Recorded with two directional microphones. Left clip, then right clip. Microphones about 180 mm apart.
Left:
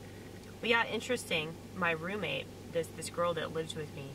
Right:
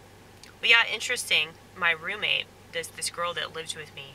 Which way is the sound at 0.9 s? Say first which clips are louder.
Right 7 dB; 30° right (ahead or behind).